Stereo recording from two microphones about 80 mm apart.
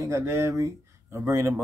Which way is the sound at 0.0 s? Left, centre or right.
Right.